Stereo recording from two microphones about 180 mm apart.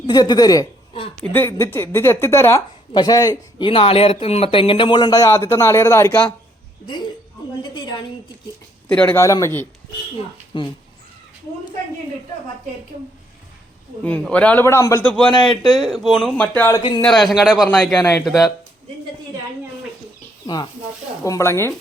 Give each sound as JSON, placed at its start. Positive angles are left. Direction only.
{"t": 0.1, "sound": "a woman's voice", "side_deg": 20}
{"t": 1.2, "sound": "speech", "side_deg": 10}
{"t": 7.8, "sound": "speech", "side_deg": 25}
{"t": 8.9, "sound": "speech", "side_deg": 10}
{"t": 10.5, "sound": "speech", "side_deg": 25}
{"t": 14.0, "sound": "speech", "side_deg": 5}
{"t": 15.6, "sound": "speech", "side_deg": 0}
{"t": 17.0, "sound": "speech", "side_deg": 0}
{"t": 21.2, "sound": "speech", "side_deg": 15}